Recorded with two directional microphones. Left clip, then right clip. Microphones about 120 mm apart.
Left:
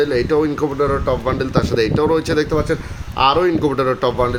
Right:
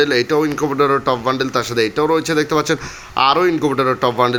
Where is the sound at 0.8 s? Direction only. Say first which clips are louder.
Right 4 dB; 45° right (ahead or behind).